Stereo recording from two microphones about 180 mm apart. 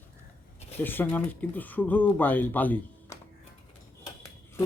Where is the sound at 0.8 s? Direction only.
10° left (ahead or behind).